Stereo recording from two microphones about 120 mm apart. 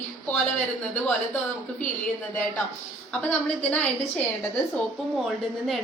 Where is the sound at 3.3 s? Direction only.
10° left (ahead or behind).